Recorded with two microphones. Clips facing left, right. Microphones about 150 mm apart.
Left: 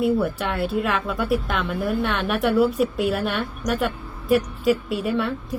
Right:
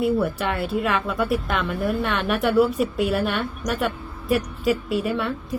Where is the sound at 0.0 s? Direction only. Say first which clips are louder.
Even; centre (ahead or behind).